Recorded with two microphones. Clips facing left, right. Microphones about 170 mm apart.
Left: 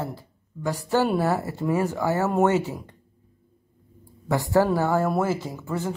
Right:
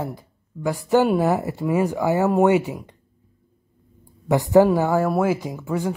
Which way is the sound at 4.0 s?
20° right (ahead or behind).